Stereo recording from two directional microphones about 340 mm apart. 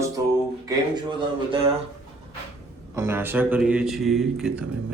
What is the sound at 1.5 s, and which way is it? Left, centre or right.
Speech, centre.